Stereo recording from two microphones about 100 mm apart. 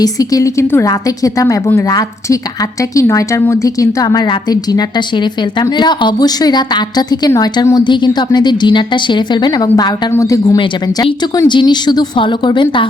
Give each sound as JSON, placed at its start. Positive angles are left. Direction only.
{"t": 0.0, "sound": "a woman's voice", "side_deg": 35}
{"t": 7.9, "sound": "a woman's voice", "side_deg": 50}
{"t": 10.1, "sound": "a woman's voice", "side_deg": 30}